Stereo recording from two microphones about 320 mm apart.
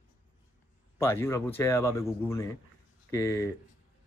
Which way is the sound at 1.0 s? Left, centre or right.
Centre.